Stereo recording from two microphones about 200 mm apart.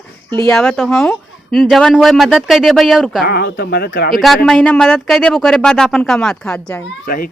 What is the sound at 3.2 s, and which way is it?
Speech, 50° left (ahead or behind).